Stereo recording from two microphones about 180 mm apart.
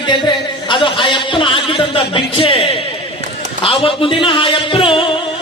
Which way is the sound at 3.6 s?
30° left (ahead or behind).